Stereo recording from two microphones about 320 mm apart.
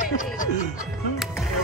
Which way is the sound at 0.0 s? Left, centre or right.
Left.